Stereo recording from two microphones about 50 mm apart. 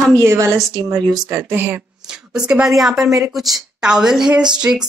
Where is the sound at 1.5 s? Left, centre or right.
Right.